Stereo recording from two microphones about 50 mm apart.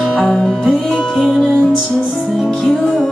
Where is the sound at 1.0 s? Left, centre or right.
Centre.